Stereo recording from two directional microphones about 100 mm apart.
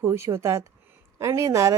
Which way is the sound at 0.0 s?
30° right (ahead or behind).